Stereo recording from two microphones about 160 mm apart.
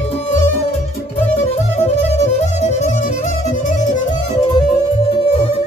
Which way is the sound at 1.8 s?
40° left (ahead or behind).